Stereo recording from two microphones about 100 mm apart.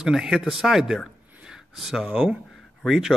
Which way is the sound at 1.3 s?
10° right (ahead or behind).